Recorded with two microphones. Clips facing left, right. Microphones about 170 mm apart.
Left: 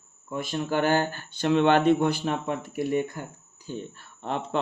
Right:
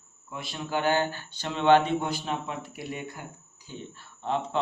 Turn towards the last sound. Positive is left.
turn(degrees=60)  # may be behind; listen again after turning